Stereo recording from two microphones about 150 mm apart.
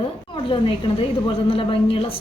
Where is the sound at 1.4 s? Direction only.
35° left (ahead or behind).